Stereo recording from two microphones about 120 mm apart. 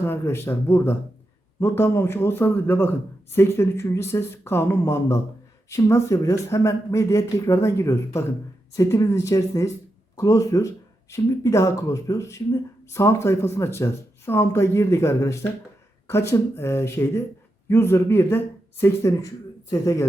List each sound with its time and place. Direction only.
0.0 s speech: 20° left (ahead or behind)